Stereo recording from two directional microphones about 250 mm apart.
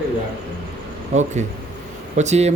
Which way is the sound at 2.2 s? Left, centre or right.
Right.